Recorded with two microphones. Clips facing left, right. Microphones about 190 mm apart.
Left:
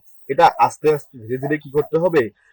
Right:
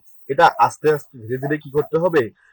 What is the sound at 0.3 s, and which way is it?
Speech, 10° left (ahead or behind).